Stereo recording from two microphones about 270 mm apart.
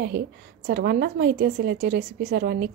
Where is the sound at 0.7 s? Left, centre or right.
Right.